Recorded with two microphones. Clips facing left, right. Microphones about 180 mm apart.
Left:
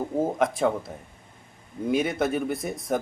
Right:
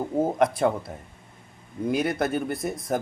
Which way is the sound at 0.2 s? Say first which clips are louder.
Right 2 dB; centre (ahead or behind).